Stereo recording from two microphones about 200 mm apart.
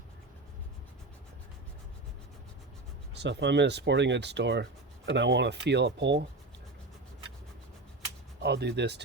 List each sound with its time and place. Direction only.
3.2 s speech: 60° right (ahead or behind)
8.4 s speech: 55° right (ahead or behind)